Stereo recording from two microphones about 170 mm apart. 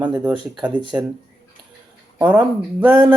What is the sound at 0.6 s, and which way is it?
Speech, 10° right (ahead or behind).